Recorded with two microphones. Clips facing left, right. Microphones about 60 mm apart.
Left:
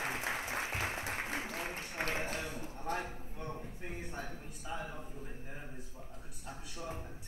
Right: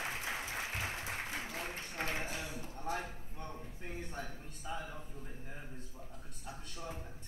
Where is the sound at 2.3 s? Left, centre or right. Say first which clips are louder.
Left 3 dB; left.